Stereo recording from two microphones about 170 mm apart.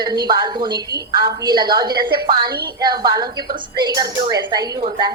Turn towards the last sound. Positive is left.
turn(degrees=-25)  # may be behind; listen again after turning